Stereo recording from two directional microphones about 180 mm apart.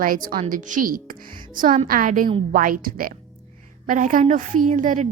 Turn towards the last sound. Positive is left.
turn(degrees=-45)  # may be behind; listen again after turning